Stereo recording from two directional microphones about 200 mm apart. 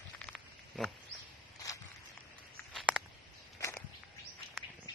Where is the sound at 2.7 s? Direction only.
Centre (ahead or behind).